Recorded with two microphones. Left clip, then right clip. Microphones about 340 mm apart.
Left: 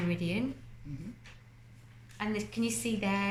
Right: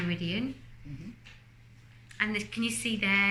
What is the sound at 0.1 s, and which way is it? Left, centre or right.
Speech, centre.